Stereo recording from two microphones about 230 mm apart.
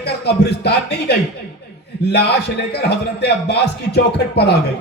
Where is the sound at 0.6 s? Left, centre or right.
Left.